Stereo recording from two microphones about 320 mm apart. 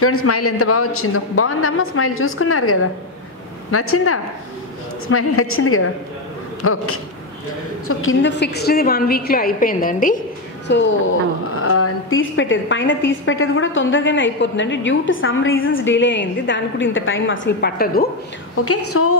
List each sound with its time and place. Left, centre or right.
0.0 s a woman's voice: left
11.6 s a woman's voice: left
18.7 s a woman's voice: left